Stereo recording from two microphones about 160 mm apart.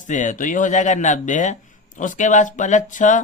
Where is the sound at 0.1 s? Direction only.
50° left (ahead or behind).